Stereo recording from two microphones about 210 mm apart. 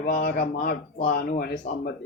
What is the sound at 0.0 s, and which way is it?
A man's voice, 40° left (ahead or behind).